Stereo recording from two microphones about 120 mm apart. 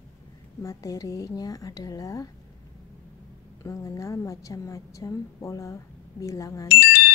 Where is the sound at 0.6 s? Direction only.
30° left (ahead or behind).